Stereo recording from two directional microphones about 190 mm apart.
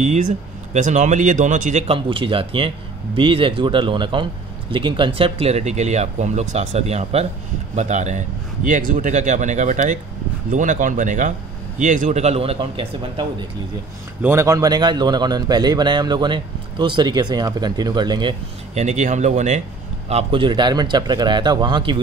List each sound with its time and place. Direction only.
0.0 s a man's voice: 40° right (ahead or behind)
14.2 s speech: 15° right (ahead or behind)
18.8 s a man's voice: 40° right (ahead or behind)